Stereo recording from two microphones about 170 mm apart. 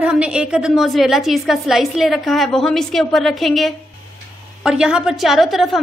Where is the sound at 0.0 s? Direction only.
5° right (ahead or behind).